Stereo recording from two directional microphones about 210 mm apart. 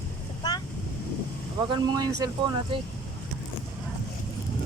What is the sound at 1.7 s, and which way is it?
Speech, 20° right (ahead or behind).